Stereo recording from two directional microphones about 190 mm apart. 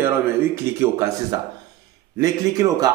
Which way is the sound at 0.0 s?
15° right (ahead or behind).